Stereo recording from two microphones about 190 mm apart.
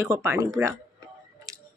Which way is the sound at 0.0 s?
15° right (ahead or behind).